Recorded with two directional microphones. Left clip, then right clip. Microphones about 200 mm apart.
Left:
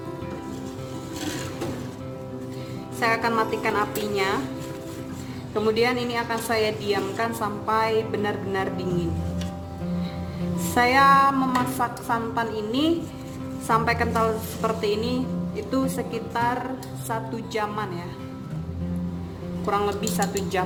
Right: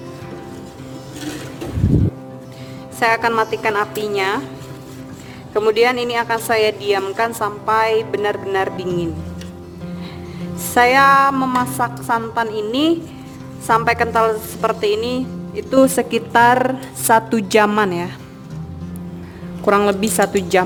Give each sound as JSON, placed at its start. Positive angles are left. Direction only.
{"t": 3.0, "sound": "a woman's voice", "side_deg": -60}
{"t": 5.5, "sound": "a woman's voice", "side_deg": -55}
{"t": 10.8, "sound": "a woman's voice", "side_deg": -60}
{"t": 19.6, "sound": "a woman's voice", "side_deg": -50}